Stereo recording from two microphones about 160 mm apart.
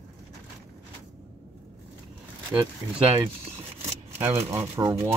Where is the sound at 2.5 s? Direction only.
5° right (ahead or behind).